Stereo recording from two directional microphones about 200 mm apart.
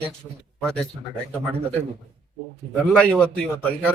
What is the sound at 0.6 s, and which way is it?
Speech, 5° left (ahead or behind).